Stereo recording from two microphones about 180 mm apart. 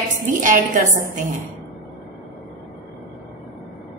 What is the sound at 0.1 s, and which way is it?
Speech, 45° right (ahead or behind).